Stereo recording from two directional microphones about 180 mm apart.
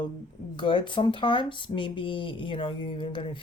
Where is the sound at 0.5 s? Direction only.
25° left (ahead or behind).